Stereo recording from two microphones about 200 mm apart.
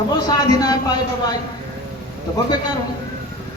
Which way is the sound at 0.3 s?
20° left (ahead or behind).